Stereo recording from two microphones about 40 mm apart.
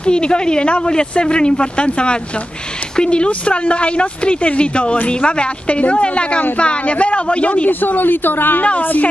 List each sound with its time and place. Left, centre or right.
0.0 s speech: left
7.8 s a woman's voice: left